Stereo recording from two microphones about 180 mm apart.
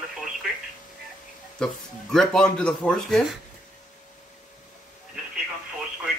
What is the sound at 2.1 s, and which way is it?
A man's voice, 5° left (ahead or behind).